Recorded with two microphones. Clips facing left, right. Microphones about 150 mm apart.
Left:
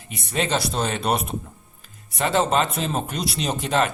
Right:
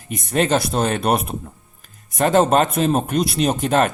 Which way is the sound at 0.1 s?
50° right (ahead or behind).